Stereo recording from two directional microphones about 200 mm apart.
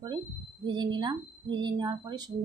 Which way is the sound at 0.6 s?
20° right (ahead or behind).